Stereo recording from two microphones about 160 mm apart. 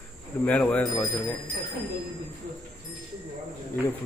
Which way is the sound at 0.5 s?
10° left (ahead or behind).